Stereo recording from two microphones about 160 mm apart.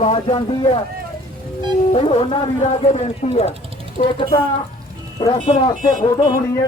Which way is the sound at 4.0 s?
55° left (ahead or behind).